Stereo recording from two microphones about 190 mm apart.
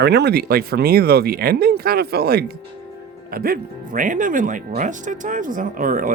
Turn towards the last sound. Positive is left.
turn(degrees=-45)  # may be behind; listen again after turning